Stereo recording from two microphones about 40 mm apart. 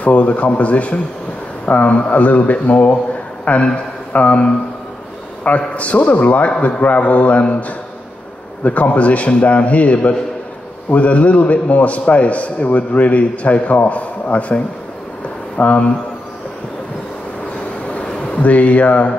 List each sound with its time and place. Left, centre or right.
0.0 s a man's voice: left
18.3 s a man's voice: left